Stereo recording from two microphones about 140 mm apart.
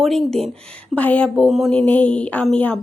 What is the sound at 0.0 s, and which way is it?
Speech, 5° left (ahead or behind).